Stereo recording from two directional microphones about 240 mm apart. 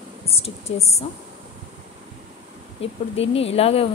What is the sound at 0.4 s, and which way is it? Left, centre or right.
Speech, left.